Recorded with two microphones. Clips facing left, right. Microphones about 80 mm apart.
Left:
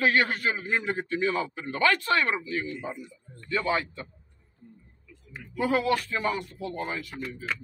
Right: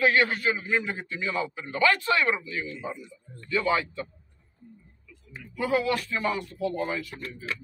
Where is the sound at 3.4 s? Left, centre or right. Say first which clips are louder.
Right 2 dB; left.